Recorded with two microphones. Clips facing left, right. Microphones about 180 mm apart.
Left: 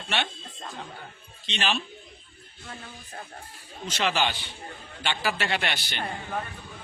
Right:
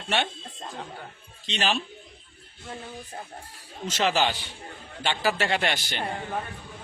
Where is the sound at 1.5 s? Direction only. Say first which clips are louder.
Right 2 dB; 40° right (ahead or behind).